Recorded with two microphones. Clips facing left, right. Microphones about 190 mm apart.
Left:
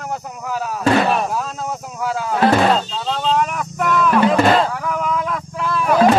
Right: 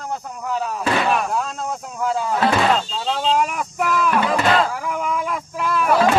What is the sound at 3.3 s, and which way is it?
Vehicle, 5° right (ahead or behind).